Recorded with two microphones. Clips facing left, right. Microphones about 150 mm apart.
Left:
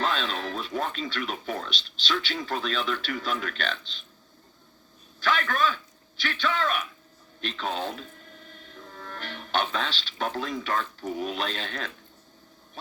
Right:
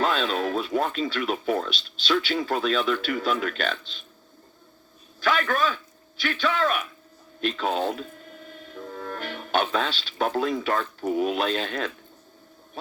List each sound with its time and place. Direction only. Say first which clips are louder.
0.0 s speech: right 5 dB; 45° right (ahead or behind)
5.2 s a man's voice: right 2 dB; 45° right (ahead or behind)